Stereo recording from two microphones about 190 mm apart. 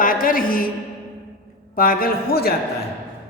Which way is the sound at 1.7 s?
50° left (ahead or behind).